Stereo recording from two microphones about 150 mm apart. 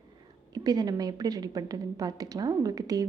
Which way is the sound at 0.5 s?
25° right (ahead or behind).